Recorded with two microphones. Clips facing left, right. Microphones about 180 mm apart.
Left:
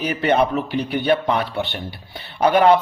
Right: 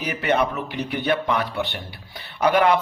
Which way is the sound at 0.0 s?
30° left (ahead or behind).